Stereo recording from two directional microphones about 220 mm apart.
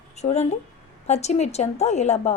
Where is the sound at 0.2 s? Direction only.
30° left (ahead or behind).